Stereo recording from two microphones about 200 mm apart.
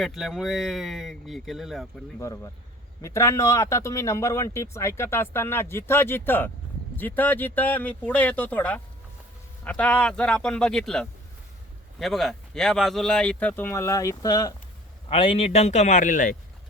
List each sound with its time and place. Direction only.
0.0 s speech: centre (ahead or behind)
2.1 s a man's voice: 15° left (ahead or behind); by 16.4 s 40° left (ahead or behind)